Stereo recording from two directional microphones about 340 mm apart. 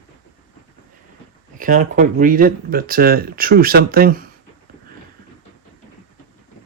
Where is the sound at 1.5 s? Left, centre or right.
Right.